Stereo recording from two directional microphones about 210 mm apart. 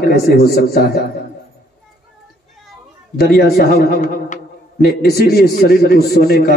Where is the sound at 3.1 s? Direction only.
45° left (ahead or behind).